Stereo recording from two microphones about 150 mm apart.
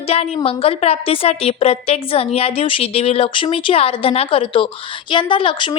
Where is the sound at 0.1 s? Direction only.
45° left (ahead or behind).